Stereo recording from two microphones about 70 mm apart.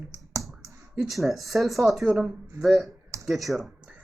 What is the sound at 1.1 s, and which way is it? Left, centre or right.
Speech, centre.